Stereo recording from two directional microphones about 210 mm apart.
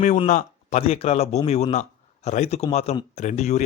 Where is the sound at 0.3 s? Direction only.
35° left (ahead or behind).